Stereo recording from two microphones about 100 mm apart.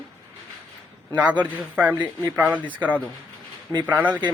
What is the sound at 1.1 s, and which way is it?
Speech, 15° right (ahead or behind).